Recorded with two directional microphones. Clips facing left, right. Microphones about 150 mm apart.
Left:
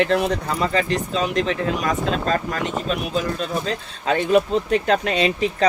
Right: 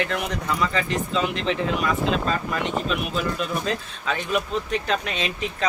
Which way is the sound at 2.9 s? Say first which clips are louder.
Left 2 dB; 40° left (ahead or behind).